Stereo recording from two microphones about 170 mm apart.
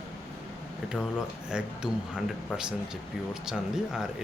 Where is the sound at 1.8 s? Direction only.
30° left (ahead or behind).